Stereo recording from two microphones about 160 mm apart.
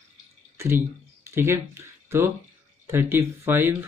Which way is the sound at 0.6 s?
15° right (ahead or behind).